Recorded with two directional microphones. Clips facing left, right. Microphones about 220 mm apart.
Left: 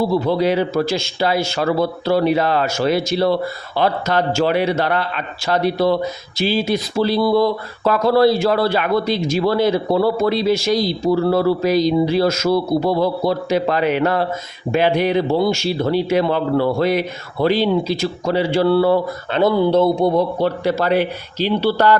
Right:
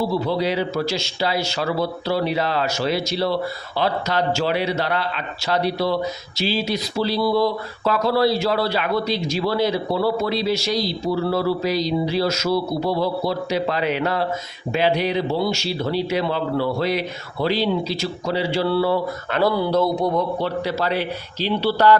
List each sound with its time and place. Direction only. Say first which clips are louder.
0.1 s speech: left 5 dB; 50° left (ahead or behind)
19.3 s speech: left 5 dB; 20° left (ahead or behind)
20.4 s speech: left 5 dB; 50° left (ahead or behind)